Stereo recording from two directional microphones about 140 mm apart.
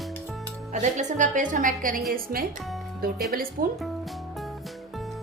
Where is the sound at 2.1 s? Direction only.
90° right.